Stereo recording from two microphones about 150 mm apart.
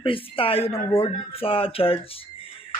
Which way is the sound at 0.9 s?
20° left (ahead or behind).